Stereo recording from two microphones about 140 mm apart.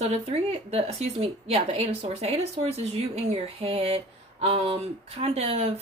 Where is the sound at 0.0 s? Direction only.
45° right (ahead or behind).